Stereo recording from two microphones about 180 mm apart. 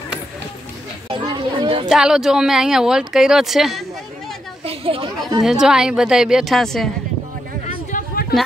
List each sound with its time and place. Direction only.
1.1 s chatter: 25° right (ahead or behind)
1.9 s speech: 5° right (ahead or behind)
4.6 s chatter: 30° right (ahead or behind)
5.4 s speech: centre (ahead or behind)
7.9 s chatter: 60° left (ahead or behind)